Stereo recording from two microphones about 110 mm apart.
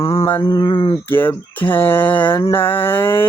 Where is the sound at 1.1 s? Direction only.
20° left (ahead or behind).